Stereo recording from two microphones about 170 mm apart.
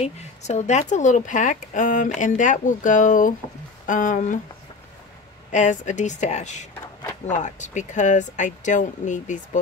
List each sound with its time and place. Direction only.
0.0 s speech: 40° left (ahead or behind)
5.5 s speech: 45° left (ahead or behind)